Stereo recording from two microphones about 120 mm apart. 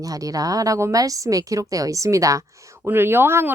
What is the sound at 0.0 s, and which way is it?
Speech, 30° right (ahead or behind).